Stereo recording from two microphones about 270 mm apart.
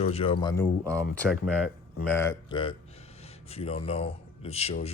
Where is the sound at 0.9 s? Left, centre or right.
Centre.